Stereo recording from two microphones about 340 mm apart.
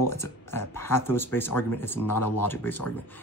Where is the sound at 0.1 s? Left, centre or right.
Centre.